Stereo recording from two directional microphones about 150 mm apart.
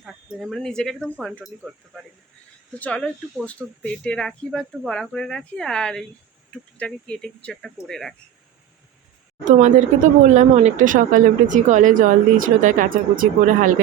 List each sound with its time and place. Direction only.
0.0 s speech: centre (ahead or behind)
9.4 s speech: 55° right (ahead or behind)